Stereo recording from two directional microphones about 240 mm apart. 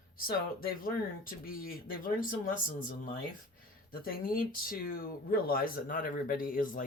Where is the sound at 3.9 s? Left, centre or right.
Left.